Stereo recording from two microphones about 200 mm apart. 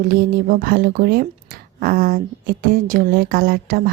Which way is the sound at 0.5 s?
45° right (ahead or behind).